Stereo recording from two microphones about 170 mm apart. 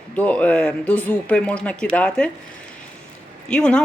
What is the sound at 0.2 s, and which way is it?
Speech, 10° left (ahead or behind).